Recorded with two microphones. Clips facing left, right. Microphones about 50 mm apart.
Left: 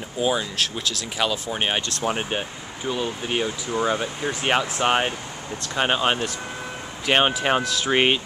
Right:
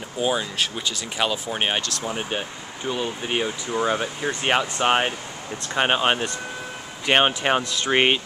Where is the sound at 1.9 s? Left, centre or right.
Left.